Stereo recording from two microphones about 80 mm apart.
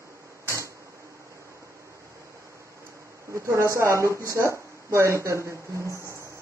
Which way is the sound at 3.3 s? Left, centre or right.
Right.